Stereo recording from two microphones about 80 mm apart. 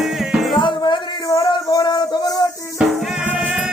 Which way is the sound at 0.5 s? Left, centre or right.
Left.